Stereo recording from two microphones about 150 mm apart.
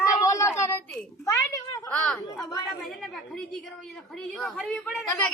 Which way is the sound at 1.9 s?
5° left (ahead or behind).